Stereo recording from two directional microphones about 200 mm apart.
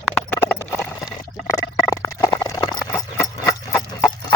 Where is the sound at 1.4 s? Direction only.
15° left (ahead or behind).